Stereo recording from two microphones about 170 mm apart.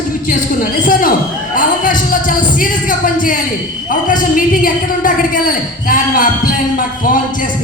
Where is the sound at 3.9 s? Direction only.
50° left (ahead or behind).